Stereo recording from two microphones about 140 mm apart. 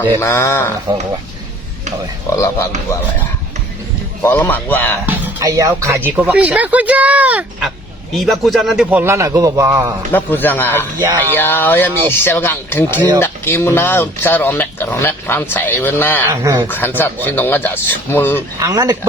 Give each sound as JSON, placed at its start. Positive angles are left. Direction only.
{"t": 0.2, "sound": "speech", "side_deg": 20}
{"t": 2.3, "sound": "speech", "side_deg": 20}
{"t": 4.2, "sound": "speech", "side_deg": 15}
{"t": 5.0, "sound": "speech", "side_deg": -25}
{"t": 10.1, "sound": "speech", "side_deg": 15}
{"t": 16.3, "sound": "speech", "side_deg": -25}
{"t": 16.6, "sound": "speech", "side_deg": 15}
{"t": 18.6, "sound": "speech", "side_deg": -25}